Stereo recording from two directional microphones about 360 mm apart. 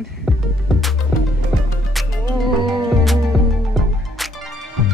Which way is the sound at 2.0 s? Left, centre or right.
Centre.